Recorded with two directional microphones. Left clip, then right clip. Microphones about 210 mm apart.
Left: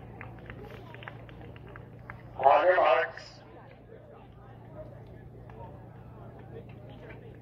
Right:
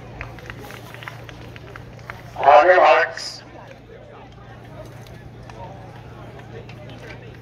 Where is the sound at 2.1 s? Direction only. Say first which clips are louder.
Right 10 dB; 55° right (ahead or behind).